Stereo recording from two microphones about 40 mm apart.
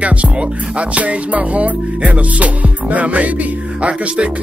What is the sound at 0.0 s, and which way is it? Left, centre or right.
Music, right.